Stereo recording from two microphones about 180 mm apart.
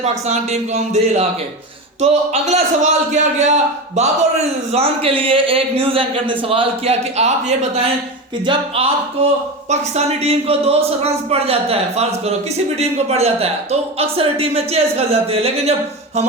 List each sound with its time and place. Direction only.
0.0 s speech: 40° right (ahead or behind)